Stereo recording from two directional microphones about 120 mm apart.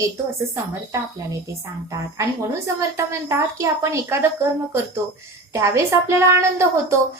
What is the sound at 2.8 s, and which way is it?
A woman's voice, 25° right (ahead or behind).